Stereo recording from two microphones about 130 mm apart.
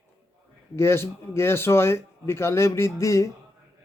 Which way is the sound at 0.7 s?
20° left (ahead or behind).